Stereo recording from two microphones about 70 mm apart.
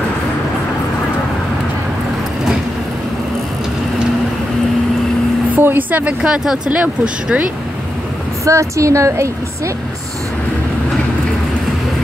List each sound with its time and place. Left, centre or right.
5.6 s a sound: right
6.2 s speech: centre
8.5 s a woman's voice: right